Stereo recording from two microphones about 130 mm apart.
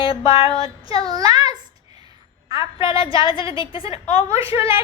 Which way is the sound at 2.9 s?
45° left (ahead or behind).